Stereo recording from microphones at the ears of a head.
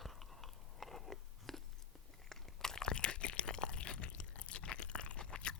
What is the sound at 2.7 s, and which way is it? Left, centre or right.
Crunch, left.